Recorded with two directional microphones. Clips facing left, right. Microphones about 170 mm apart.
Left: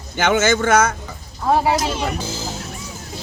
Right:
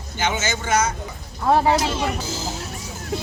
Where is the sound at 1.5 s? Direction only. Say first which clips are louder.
Even; 10° left (ahead or behind).